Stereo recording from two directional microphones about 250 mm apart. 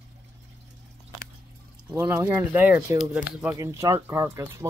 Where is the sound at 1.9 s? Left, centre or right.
Centre.